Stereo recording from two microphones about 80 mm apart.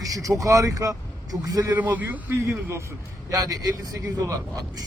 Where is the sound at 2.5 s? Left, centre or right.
Right.